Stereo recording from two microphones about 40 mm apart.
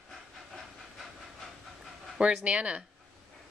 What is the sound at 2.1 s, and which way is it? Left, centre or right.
Speech, right.